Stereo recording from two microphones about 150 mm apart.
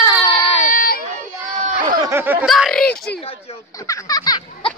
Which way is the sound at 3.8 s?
25° left (ahead or behind).